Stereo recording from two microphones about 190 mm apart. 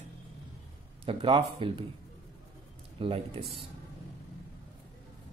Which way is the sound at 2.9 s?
30° right (ahead or behind).